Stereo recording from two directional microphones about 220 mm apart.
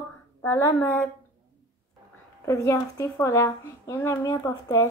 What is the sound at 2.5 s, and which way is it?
A woman's voice, 15° left (ahead or behind).